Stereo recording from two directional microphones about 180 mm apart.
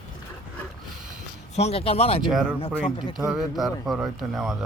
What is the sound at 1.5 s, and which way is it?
Speech, 35° left (ahead or behind).